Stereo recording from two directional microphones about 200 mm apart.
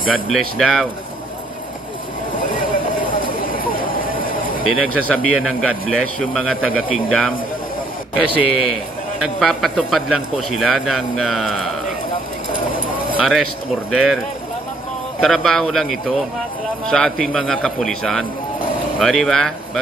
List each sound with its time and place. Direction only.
0.3 s a man's voice: centre (ahead or behind)
3.2 s a sound: 45° left (ahead or behind)
4.9 s a man's voice: 5° left (ahead or behind)
8.4 s a man's voice: centre (ahead or behind)
13.2 s a man's voice: centre (ahead or behind)